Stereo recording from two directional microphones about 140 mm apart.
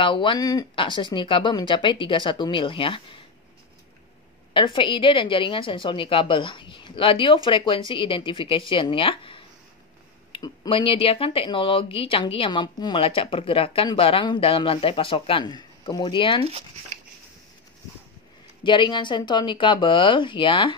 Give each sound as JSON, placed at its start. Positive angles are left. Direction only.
{"t": 0.0, "sound": "speech", "side_deg": 35}
{"t": 0.7, "sound": "speech", "side_deg": 35}
{"t": 4.6, "sound": "speech", "side_deg": 35}
{"t": 18.6, "sound": "speech", "side_deg": 35}